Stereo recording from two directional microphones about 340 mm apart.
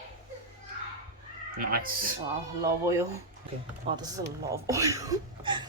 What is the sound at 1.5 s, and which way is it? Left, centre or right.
Speech, right.